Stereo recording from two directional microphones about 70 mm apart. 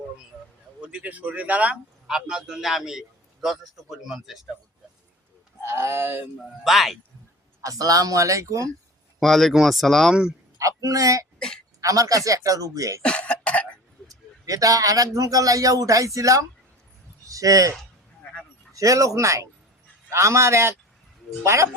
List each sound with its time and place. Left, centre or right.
0.8 s a man's voice: centre
5.6 s speech: right
6.7 s speech: centre
7.6 s speech: right
9.2 s speech: centre
10.1 s a man's voice: centre
10.6 s a man's voice: right
11.3 s a woman's voice: centre
11.8 s speech: right
13.0 s cough: centre
14.1 s speech: right